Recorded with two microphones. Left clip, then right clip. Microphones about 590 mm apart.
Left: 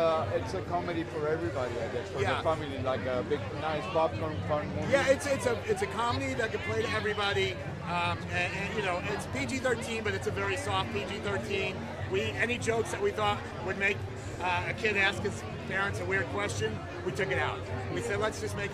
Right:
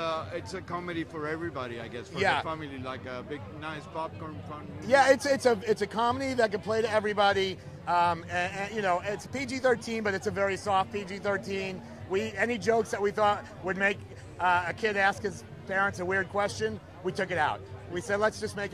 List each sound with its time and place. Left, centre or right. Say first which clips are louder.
0.5 s speech: left 3 dB; centre
2.1 s a man's voice: right 5 dB; right
2.4 s speech: left 6 dB; centre
4.9 s a man's voice: right 5 dB; right